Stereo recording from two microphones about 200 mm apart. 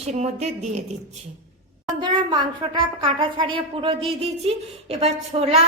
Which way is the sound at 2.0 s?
20° right (ahead or behind).